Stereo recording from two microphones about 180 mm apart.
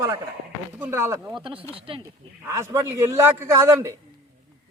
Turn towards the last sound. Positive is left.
turn(degrees=-15)  # may be behind; listen again after turning